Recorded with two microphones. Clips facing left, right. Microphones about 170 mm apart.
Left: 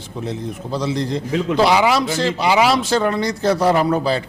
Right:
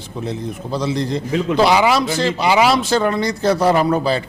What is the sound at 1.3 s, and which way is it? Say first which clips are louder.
A man's voice: right 1 dB; 15° right (ahead or behind).